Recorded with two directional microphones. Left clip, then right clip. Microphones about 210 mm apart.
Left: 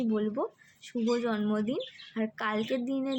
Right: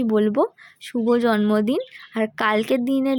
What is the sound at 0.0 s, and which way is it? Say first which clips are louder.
Speech: right 12 dB; 45° right (ahead or behind).